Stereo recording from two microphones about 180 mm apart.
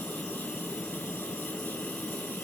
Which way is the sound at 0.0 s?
10° left (ahead or behind).